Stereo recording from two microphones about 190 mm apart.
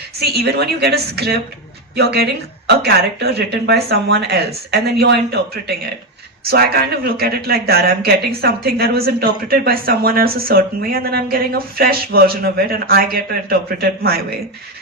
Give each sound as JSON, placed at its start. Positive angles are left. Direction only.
{"t": 0.2, "sound": "speech", "side_deg": -60}
{"t": 7.0, "sound": "speech", "side_deg": -55}